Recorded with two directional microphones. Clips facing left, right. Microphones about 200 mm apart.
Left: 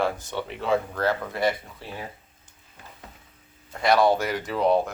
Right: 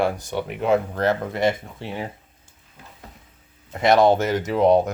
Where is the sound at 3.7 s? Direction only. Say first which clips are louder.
Right 4 dB; 20° right (ahead or behind).